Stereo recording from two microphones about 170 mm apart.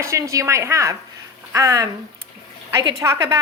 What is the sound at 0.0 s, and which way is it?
A woman's voice, 20° right (ahead or behind).